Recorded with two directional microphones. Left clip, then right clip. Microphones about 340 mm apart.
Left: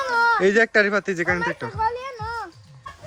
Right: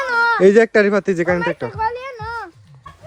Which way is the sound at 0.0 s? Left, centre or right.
Right.